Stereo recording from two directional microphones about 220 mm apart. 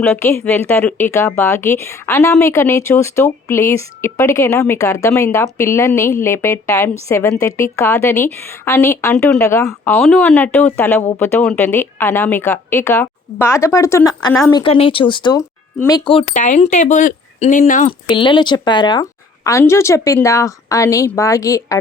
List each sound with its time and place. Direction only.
0.0 s a woman's voice: 10° left (ahead or behind); by 17.9 s 35° left (ahead or behind)
18.1 s a woman's voice: 20° left (ahead or behind)